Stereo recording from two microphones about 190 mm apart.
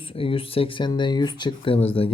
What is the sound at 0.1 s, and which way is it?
Speech, 30° left (ahead or behind).